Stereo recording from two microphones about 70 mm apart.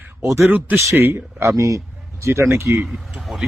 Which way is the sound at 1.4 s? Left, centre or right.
Right.